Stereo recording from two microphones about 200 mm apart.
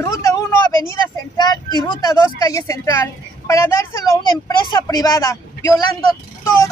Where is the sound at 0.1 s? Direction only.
15° left (ahead or behind).